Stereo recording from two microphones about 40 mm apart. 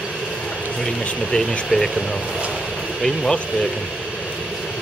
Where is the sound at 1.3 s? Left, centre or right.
Left.